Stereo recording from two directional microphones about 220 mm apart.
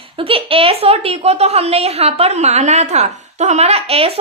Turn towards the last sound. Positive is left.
turn(degrees=-25)  # may be behind; listen again after turning